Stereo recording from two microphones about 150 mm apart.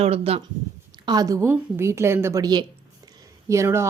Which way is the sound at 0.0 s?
40° right (ahead or behind).